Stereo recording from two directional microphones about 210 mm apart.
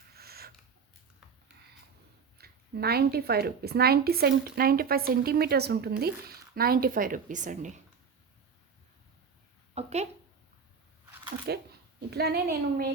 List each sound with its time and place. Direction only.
0.1 s a sound: 45° right (ahead or behind)
2.4 s a woman's voice: 50° right (ahead or behind)
9.7 s speech: 30° right (ahead or behind)
11.5 s a woman's voice: 50° right (ahead or behind)